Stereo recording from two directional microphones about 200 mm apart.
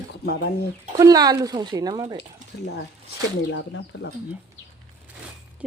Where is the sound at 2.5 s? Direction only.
55° left (ahead or behind).